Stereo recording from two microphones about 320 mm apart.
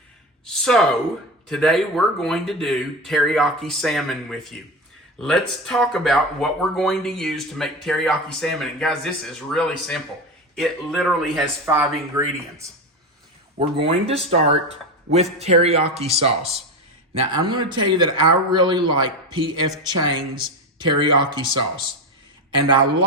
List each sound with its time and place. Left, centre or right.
0.6 s a man's voice: centre